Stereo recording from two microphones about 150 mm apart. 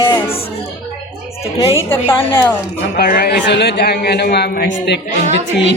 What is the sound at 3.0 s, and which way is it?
Speech, 85° left.